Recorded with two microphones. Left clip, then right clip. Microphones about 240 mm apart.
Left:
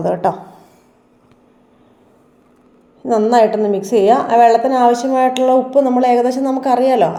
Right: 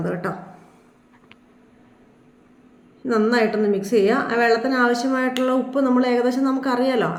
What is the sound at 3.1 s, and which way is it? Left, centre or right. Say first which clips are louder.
A woman's voice: left 7 dB; centre.